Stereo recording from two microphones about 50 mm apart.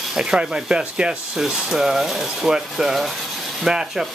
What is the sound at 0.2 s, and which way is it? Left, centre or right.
Speech, centre.